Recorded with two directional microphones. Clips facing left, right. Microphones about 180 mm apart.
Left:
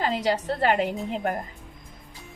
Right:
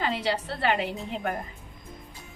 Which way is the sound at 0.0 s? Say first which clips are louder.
Left 3 dB; 40° left (ahead or behind).